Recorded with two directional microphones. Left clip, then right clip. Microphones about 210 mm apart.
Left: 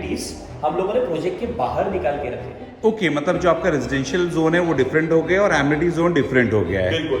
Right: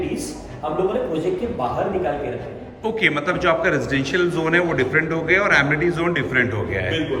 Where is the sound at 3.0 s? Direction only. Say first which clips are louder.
Right 3 dB; 15° left (ahead or behind).